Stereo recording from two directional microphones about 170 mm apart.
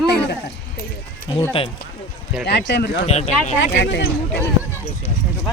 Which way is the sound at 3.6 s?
90° left.